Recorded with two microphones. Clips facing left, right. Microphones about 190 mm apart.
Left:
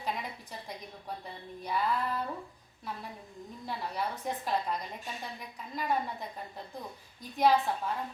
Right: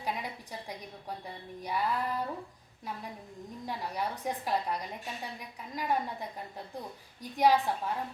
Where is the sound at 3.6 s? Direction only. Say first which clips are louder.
Even; 15° right (ahead or behind).